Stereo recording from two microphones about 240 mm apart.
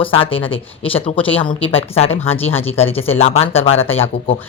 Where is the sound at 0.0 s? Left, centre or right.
Left.